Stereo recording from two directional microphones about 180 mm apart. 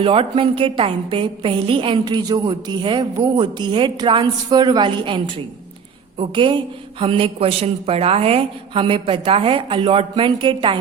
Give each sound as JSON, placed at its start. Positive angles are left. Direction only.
{"t": 0.0, "sound": "a woman's voice", "side_deg": -30}